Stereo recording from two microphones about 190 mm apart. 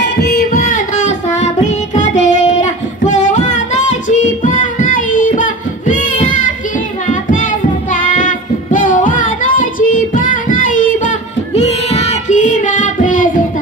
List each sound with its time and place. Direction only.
0.0 s music: 55° left (ahead or behind); by 2.1 s 40° left (ahead or behind)
2.2 s singing: 40° left (ahead or behind)
7.1 s music: 45° left (ahead or behind)
7.9 s child singing: 45° left (ahead or behind)